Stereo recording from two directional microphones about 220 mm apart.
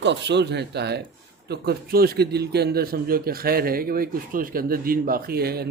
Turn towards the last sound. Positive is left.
turn(degrees=-45)  # may be behind; listen again after turning